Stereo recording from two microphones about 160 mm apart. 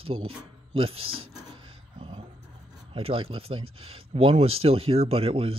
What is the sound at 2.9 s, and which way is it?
Speech, 35° right (ahead or behind).